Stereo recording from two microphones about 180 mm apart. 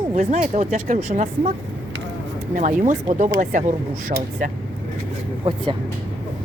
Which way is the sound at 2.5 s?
45° right (ahead or behind).